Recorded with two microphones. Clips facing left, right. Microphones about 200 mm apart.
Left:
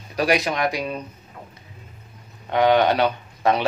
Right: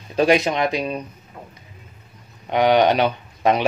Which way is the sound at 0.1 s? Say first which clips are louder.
Right 4 dB; 25° right (ahead or behind).